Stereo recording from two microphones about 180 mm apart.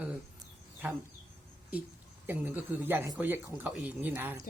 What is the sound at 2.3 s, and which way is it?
Speech, 10° right (ahead or behind).